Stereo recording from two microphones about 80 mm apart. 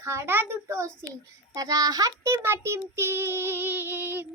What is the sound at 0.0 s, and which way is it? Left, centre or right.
Speech, right.